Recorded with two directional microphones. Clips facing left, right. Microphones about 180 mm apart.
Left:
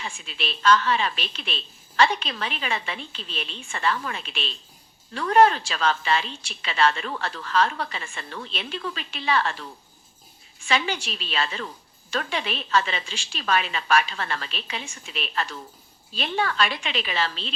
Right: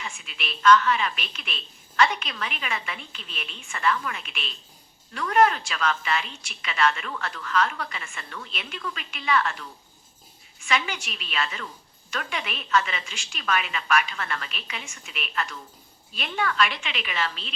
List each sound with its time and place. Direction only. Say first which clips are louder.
0.0 s a woman's voice: left 4 dB; 30° left (ahead or behind)